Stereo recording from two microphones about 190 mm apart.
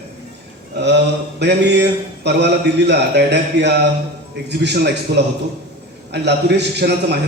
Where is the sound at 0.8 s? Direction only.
65° right (ahead or behind).